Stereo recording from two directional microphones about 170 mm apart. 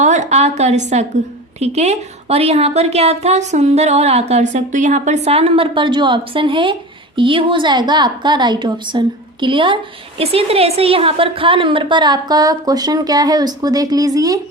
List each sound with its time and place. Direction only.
0.0 s a woman's voice: 45° right (ahead or behind); by 14.3 s 20° right (ahead or behind)